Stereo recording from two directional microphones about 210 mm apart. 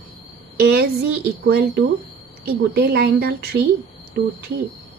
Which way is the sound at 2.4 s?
50° right (ahead or behind).